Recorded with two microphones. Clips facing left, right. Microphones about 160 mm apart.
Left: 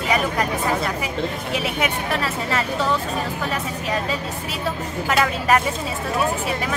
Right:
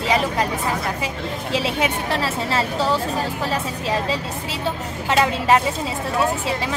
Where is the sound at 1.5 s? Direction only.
30° right (ahead or behind).